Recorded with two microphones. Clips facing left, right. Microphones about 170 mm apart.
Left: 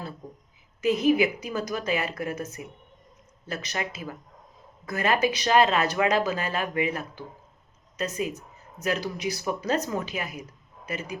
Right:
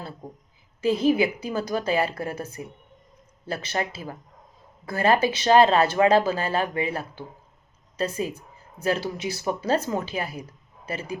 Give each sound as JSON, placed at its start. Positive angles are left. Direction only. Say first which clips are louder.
{"t": 0.8, "sound": "a woman's voice", "louder": "right 1 dB", "side_deg": -30}